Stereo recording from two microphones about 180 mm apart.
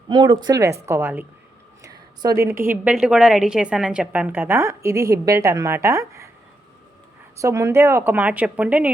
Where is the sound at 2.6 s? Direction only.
5° right (ahead or behind).